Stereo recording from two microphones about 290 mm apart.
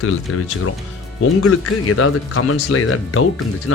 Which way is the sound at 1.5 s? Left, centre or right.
Left.